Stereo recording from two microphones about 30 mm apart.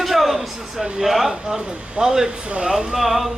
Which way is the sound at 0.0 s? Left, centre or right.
Centre.